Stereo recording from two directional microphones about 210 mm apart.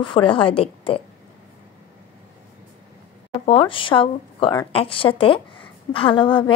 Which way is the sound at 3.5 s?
25° left (ahead or behind).